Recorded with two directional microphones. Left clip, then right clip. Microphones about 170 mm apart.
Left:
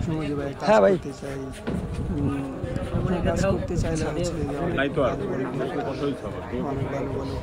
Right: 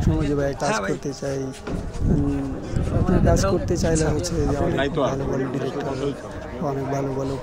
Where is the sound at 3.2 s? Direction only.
20° right (ahead or behind).